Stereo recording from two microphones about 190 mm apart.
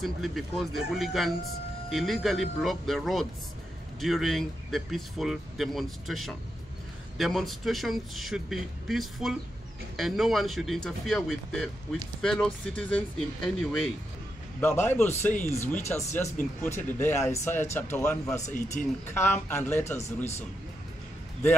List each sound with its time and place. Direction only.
0.0 s speech: centre (ahead or behind)
18.4 s speech: 40° left (ahead or behind)
19.1 s speech: 10° left (ahead or behind)